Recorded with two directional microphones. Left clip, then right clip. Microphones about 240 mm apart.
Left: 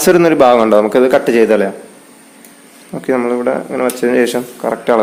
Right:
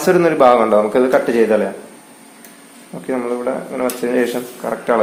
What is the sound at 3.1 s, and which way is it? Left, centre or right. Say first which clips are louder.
Speech: left 6 dB; left.